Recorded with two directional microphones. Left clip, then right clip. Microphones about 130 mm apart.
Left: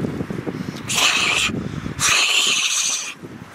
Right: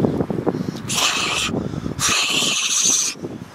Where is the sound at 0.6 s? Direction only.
Centre (ahead or behind).